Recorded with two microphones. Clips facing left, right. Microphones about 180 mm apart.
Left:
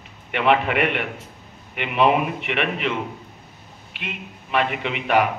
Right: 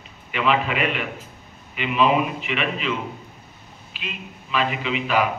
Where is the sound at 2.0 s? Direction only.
65° left (ahead or behind).